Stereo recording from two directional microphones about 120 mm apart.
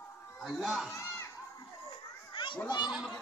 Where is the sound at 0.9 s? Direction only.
25° left (ahead or behind).